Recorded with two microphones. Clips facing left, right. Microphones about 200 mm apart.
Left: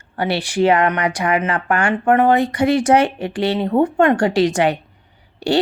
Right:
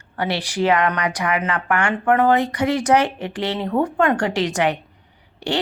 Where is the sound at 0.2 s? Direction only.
30° left (ahead or behind).